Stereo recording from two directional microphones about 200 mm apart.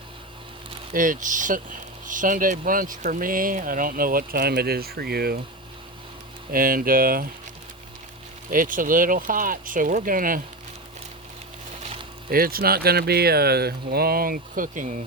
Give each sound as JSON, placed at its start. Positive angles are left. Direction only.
{"t": 0.9, "sound": "speech", "side_deg": -40}
{"t": 6.5, "sound": "speech", "side_deg": -45}
{"t": 8.4, "sound": "speech", "side_deg": -45}
{"t": 12.3, "sound": "speech", "side_deg": -45}